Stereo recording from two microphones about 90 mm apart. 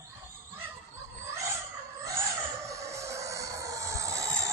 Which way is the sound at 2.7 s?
35° right (ahead or behind).